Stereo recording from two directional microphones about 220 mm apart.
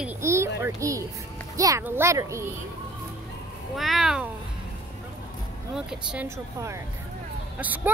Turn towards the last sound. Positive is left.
turn(degrees=-10)  # may be behind; listen again after turning